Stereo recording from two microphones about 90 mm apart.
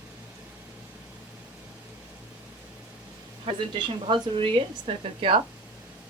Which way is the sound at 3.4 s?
65° right (ahead or behind).